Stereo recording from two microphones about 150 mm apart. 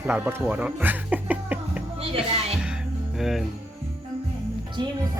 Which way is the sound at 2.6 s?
5° right (ahead or behind).